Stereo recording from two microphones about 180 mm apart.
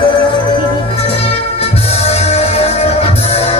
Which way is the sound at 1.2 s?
35° left (ahead or behind).